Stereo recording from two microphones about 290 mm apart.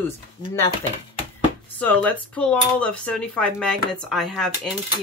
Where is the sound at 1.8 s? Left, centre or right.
Centre.